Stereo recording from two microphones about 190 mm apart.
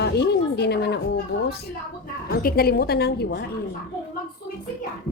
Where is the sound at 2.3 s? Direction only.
50° left (ahead or behind).